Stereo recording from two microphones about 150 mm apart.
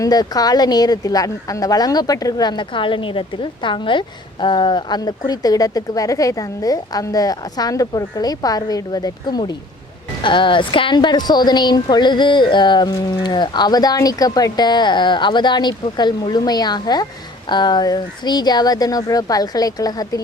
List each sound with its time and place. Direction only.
0.0 s a woman's voice: 25° left (ahead or behind)